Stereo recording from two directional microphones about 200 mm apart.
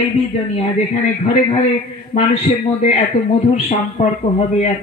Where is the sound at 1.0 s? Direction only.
40° left (ahead or behind).